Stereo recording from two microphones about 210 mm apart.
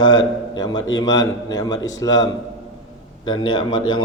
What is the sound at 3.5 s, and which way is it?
Speech, 20° left (ahead or behind).